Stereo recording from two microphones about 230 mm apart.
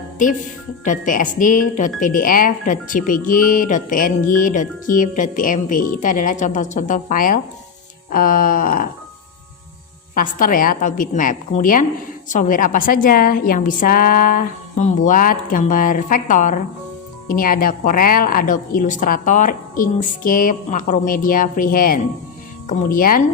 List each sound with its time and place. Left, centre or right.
0.9 s speech: left
10.2 s speech: left